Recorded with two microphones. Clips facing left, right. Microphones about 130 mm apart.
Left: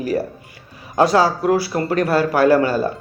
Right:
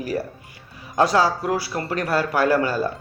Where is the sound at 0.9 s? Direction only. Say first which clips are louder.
Left 3 dB; 25° left (ahead or behind).